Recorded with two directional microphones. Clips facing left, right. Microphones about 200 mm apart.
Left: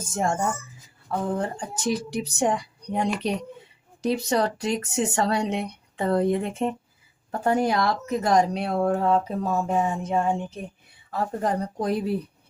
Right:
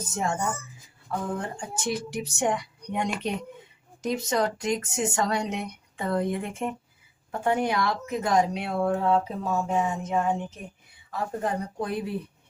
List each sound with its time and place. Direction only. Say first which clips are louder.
1.4 s speech: left 4 dB; 35° left (ahead or behind)